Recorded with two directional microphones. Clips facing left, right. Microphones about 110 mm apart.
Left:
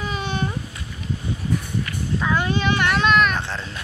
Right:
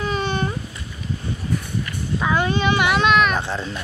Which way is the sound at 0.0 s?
5° left (ahead or behind).